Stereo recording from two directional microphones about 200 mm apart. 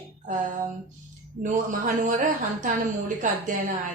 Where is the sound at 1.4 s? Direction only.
40° right (ahead or behind).